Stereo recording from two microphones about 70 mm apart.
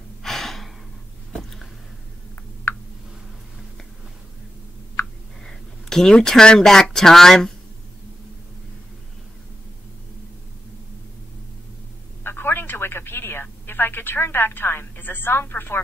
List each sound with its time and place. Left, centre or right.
0.2 s gasp: centre
5.4 s speech: centre
12.2 s telephone: left